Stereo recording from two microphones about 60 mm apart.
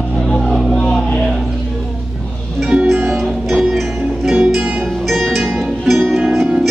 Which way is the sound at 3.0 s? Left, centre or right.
Centre.